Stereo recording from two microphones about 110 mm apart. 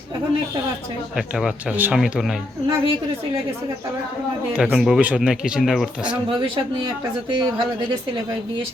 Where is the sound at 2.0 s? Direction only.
5° right (ahead or behind).